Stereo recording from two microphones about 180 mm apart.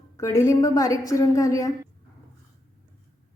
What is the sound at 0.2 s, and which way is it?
A woman's voice, 15° left (ahead or behind).